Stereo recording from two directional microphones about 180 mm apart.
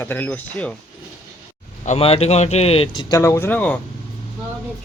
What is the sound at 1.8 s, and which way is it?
Speech, 35° left (ahead or behind).